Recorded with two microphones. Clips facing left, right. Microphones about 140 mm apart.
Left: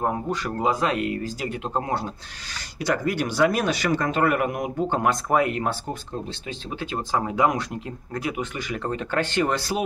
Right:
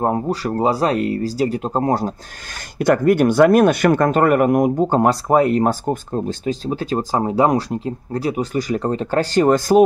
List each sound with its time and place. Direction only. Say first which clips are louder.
0.0 s speech: right 6 dB; 35° right (ahead or behind)
2.8 s speech: right 10 dB; 50° right (ahead or behind)